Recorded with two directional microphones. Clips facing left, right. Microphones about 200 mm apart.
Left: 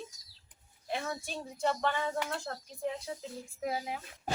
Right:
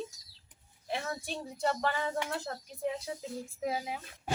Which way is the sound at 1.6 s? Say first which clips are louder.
Even; 5° right (ahead or behind).